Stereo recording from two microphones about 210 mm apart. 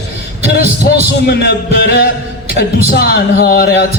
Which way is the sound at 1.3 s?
50° left (ahead or behind).